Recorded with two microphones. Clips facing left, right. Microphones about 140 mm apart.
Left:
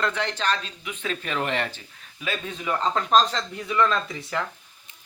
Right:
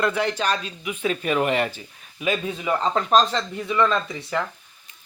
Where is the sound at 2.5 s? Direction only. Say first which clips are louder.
Right 3 dB; 5° right (ahead or behind).